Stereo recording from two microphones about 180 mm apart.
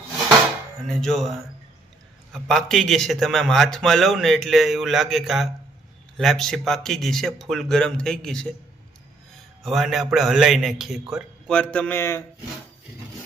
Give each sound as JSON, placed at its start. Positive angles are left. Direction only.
{"t": 0.9, "sound": "a man's voice", "side_deg": 0}
{"t": 9.6, "sound": "a man's voice", "side_deg": 0}